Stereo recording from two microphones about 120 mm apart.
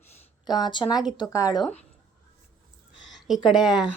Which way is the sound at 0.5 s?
35° left (ahead or behind).